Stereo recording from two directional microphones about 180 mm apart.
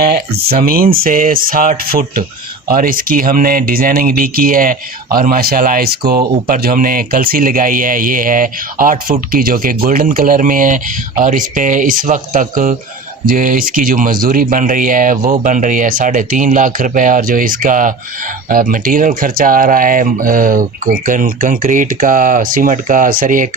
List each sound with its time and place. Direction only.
0.1 s speech: 55° right (ahead or behind)